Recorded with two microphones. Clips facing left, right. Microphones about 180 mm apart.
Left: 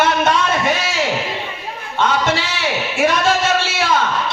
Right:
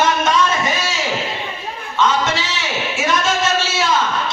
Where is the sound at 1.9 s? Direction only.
60° left (ahead or behind).